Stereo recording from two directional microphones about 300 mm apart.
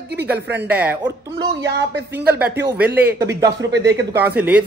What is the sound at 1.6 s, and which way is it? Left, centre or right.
Speech, right.